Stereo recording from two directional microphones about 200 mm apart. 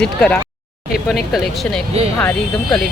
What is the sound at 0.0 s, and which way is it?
Speech, 5° left (ahead or behind).